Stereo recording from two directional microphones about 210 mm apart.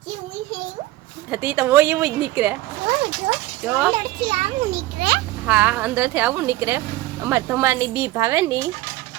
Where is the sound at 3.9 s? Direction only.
25° right (ahead or behind).